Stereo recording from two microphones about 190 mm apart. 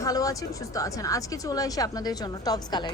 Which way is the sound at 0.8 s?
20° left (ahead or behind).